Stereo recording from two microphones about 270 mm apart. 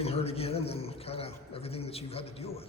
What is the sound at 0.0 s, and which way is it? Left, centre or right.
A man's voice, left.